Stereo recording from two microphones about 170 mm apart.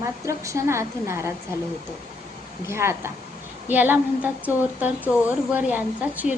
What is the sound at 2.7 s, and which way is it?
Speech, 15° right (ahead or behind).